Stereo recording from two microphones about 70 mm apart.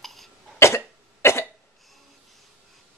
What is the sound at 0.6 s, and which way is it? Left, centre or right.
Cough, left.